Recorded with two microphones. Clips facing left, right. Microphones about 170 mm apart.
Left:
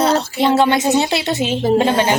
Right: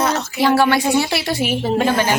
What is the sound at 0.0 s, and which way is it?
Music, 30° left (ahead or behind).